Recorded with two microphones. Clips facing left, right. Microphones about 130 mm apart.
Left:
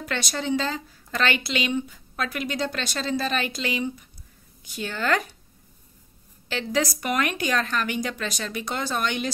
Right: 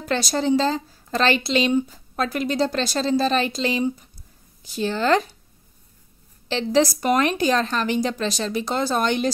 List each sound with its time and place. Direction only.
0.0 s a woman's voice: 35° right (ahead or behind)
6.5 s a woman's voice: 30° right (ahead or behind)